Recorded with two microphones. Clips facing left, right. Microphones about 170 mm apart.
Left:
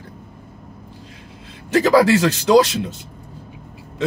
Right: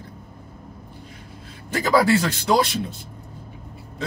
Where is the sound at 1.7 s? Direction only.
80° left.